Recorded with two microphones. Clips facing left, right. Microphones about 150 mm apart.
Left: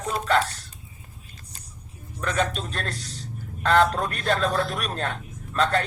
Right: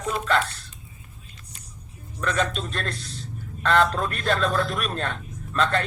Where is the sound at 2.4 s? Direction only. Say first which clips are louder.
Left 2 dB; 40° left (ahead or behind).